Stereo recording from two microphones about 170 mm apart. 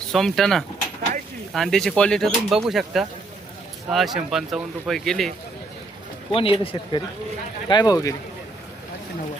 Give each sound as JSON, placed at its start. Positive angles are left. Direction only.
{"t": 0.1, "sound": "speech", "side_deg": 0}
{"t": 6.3, "sound": "speech", "side_deg": 30}